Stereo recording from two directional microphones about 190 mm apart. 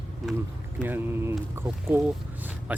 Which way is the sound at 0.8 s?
10° right (ahead or behind).